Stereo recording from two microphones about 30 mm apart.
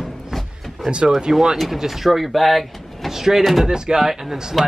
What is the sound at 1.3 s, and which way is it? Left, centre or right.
Speech, centre.